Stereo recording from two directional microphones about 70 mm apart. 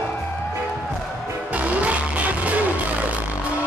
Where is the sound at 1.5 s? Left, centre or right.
Centre.